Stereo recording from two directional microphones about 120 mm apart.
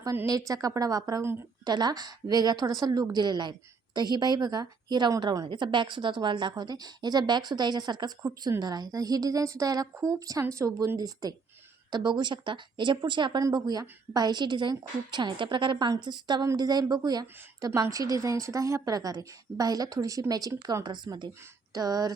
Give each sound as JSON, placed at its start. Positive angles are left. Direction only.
{"t": 0.3, "sound": "a woman's voice", "side_deg": -30}